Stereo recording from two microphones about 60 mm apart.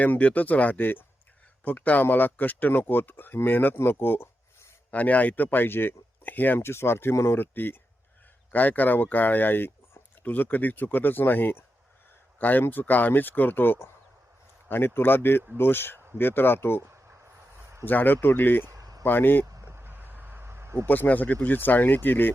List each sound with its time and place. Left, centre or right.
0.0 s speech: left
3.8 s a sound: left
4.9 s speech: left
6.7 s speech: left
7.3 s speech: left
17.8 s speech: left
18.7 s a sound: right
19.0 s speech: left
19.6 s vehicle: right
20.5 s a sound: right
20.8 s speech: left